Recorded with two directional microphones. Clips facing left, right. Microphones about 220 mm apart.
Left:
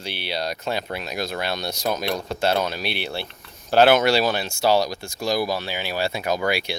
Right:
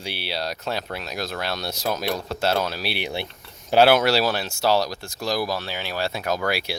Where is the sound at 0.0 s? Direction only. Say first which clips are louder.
Left 1 dB; 10° right (ahead or behind).